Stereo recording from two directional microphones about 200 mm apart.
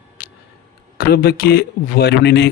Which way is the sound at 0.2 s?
40° left (ahead or behind).